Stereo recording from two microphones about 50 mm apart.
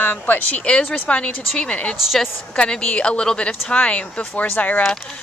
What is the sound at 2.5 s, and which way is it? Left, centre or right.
Speech, left.